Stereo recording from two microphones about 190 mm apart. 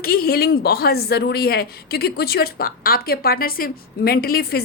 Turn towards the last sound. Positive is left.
turn(degrees=50)  # may be behind; listen again after turning